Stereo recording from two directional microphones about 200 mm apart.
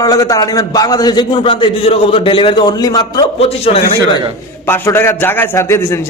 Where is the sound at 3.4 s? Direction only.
30° left (ahead or behind).